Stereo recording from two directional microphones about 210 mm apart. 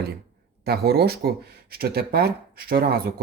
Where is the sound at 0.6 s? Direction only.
50° right (ahead or behind).